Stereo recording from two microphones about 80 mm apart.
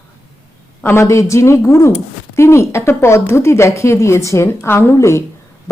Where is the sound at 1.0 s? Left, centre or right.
Left.